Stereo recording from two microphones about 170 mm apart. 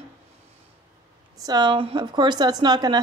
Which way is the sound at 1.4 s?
25° right (ahead or behind).